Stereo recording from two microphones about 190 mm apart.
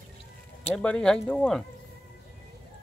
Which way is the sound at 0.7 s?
5° left (ahead or behind).